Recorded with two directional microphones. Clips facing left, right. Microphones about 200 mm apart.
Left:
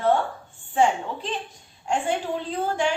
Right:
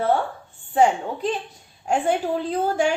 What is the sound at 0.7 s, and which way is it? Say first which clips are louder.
Speech: right 3 dB; 40° right (ahead or behind).